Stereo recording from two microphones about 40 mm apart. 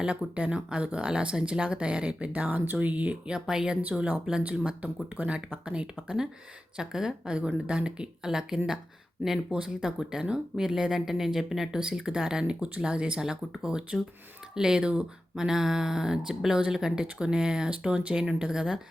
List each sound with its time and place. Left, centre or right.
0.5 s speech: right
3.2 s speech: right
7.3 s speech: right
12.5 s speech: right
13.1 s speech: centre